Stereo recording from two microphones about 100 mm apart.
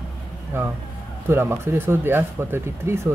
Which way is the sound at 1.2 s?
25° right (ahead or behind).